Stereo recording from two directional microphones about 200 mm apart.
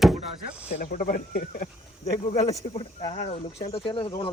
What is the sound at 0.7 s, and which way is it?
Speech, 45° left (ahead or behind).